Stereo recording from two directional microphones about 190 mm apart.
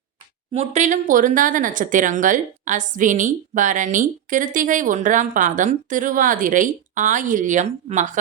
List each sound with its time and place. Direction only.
0.5 s speech: 35° right (ahead or behind)